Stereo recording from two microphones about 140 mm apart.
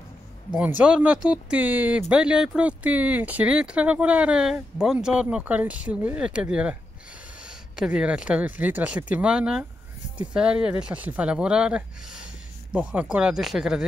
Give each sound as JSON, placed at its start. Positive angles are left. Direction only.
{"t": 0.6, "sound": "speech", "side_deg": -10}